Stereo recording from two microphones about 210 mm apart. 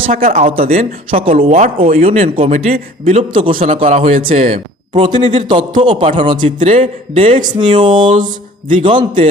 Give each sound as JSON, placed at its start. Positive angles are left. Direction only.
{"t": 0.1, "sound": "a man's voice", "side_deg": -35}
{"t": 2.0, "sound": "a man's voice", "side_deg": -30}